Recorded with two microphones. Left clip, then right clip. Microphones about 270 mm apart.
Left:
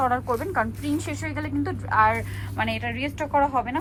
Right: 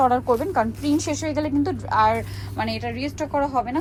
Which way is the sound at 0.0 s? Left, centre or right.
Centre.